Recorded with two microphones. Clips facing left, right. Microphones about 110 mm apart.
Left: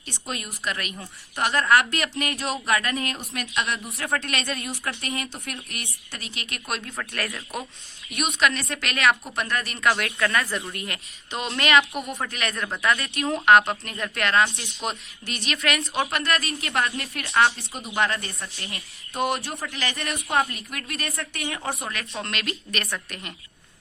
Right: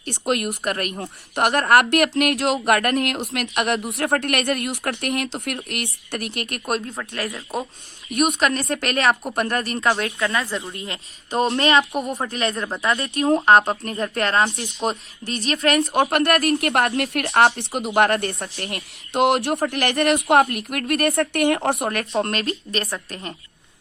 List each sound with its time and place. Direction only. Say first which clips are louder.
0.0 s speech: right 11 dB; 65° right (ahead or behind); by 6.8 s 45° right (ahead or behind)
7.0 s speech: right 3 dB; 20° right (ahead or behind)
8.1 s speech: right 4 dB; 50° right (ahead or behind)
9.9 s speech: even; 30° right (ahead or behind)
11.3 s speech: right 10 dB; 40° right (ahead or behind)
11.5 s speech: left 1 dB; 30° right (ahead or behind)
15.8 s speech: right 8 dB; 60° right (ahead or behind)
22.1 s speech: right 8 dB; 35° right (ahead or behind)